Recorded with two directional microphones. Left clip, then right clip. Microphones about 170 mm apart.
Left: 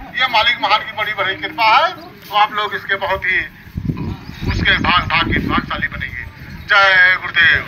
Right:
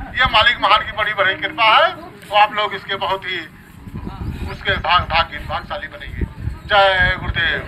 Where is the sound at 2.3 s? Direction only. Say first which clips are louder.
Even; 55° right (ahead or behind); by 3.4 s 90° right.